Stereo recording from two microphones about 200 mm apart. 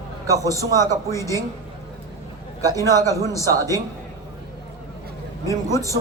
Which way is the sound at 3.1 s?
15° left (ahead or behind).